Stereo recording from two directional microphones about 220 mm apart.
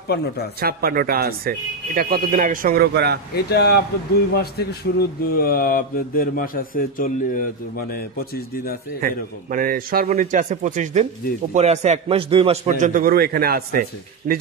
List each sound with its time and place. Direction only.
0.6 s a man's voice: 45° right (ahead or behind)
3.3 s speech: 50° left (ahead or behind)
9.0 s a man's voice: 40° right (ahead or behind)